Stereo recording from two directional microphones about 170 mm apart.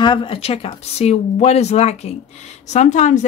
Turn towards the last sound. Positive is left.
turn(degrees=45)  # may be behind; listen again after turning